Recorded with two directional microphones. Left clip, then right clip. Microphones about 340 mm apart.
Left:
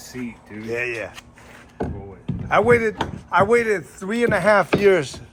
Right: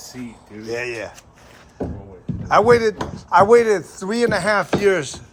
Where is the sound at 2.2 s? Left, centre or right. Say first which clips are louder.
Right 3 dB; centre.